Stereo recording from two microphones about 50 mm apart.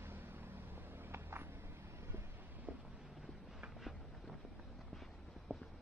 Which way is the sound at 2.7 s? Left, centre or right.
Right.